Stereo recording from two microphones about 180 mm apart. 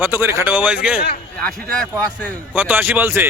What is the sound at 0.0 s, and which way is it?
Speech, 10° right (ahead or behind).